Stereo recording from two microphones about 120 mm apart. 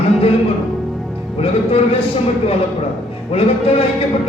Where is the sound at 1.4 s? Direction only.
55° left (ahead or behind).